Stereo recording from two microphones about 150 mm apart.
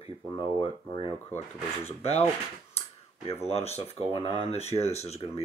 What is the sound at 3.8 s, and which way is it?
Speech, 40° left (ahead or behind).